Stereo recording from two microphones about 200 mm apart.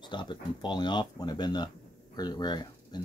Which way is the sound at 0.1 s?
25° left (ahead or behind).